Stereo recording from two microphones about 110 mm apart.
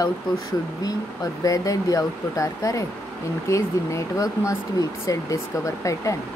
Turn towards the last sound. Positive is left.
turn(degrees=30)  # may be behind; listen again after turning